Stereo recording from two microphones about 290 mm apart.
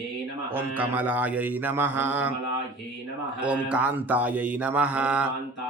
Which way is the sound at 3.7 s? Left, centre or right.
Centre.